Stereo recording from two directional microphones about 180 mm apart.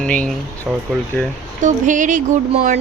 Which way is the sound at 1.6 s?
45° right (ahead or behind).